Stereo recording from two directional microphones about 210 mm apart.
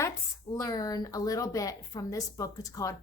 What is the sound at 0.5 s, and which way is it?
A woman's voice, 15° left (ahead or behind).